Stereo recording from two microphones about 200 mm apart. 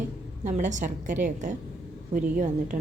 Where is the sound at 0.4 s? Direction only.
40° right (ahead or behind).